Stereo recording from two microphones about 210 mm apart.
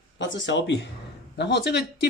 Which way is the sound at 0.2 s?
60° left (ahead or behind).